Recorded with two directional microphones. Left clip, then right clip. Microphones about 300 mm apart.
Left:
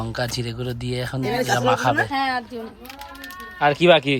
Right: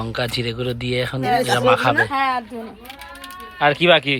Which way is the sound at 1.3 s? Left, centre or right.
Centre.